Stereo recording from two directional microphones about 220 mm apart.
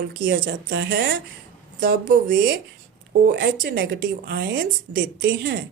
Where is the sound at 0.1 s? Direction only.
45° right (ahead or behind).